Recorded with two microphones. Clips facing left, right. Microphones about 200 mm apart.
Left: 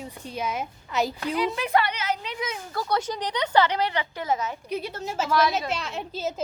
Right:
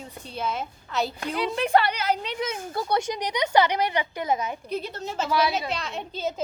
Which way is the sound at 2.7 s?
25° right (ahead or behind).